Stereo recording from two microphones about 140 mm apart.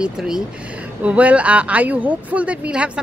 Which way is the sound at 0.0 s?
5° right (ahead or behind).